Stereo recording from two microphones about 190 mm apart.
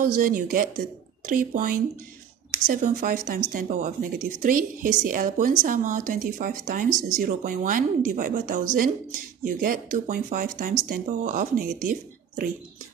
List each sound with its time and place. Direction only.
0.2 s speech: 50° right (ahead or behind)